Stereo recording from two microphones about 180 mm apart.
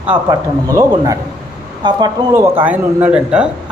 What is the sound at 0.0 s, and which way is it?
Speech, 15° right (ahead or behind).